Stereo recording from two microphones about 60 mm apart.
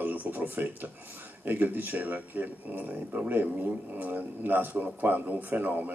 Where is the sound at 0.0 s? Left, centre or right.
Right.